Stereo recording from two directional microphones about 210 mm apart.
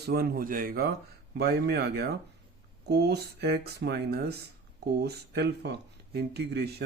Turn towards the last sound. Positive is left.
turn(degrees=-50)  # may be behind; listen again after turning